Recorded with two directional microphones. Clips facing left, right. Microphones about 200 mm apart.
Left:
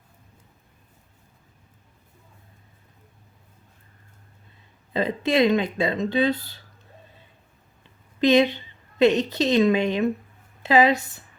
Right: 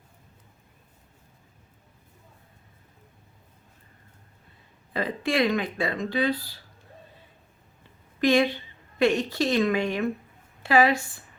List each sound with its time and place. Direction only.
4.9 s speech: 20° left (ahead or behind)
8.2 s speech: 20° left (ahead or behind)